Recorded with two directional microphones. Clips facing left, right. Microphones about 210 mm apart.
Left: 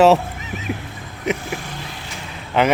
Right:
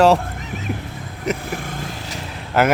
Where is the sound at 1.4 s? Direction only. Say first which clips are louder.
Right 2 dB; 50° right (ahead or behind).